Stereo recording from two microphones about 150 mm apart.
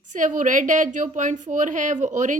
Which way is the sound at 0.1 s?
60° right (ahead or behind).